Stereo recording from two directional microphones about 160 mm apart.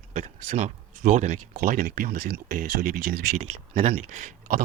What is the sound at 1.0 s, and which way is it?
Speech, 50° right (ahead or behind).